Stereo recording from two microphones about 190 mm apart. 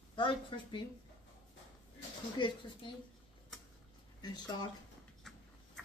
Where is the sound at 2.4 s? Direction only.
25° left (ahead or behind).